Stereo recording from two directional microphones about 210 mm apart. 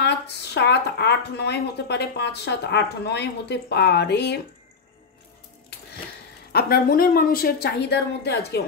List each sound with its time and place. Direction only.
0.6 s speech: 55° left (ahead or behind)
6.5 s speech: 45° left (ahead or behind)